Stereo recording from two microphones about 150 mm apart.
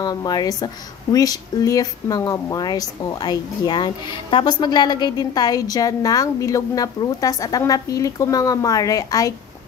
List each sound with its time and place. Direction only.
0.0 s speech: 25° left (ahead or behind)